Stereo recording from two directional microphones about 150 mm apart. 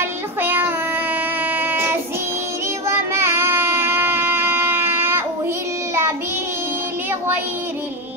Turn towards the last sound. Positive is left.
turn(degrees=-15)  # may be behind; listen again after turning